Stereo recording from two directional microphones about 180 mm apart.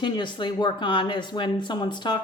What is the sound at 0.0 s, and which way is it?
A woman's voice, 25° left (ahead or behind).